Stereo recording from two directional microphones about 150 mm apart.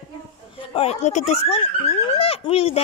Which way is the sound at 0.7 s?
45° left (ahead or behind).